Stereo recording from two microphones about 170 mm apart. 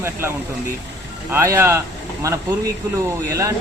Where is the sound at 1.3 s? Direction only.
15° right (ahead or behind).